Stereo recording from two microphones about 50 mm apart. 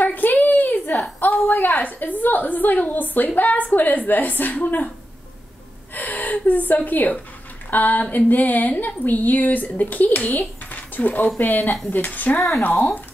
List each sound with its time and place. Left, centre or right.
0.0 s a sound: left
1.5 s speech: left
5.9 s speech: left